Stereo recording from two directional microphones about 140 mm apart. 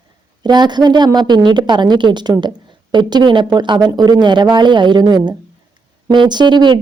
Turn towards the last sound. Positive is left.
turn(degrees=-35)  # may be behind; listen again after turning